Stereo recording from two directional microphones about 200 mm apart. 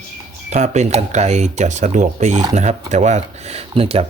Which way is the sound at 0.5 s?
35° right (ahead or behind).